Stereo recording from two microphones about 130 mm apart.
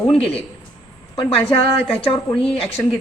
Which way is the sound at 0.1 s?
50° left (ahead or behind).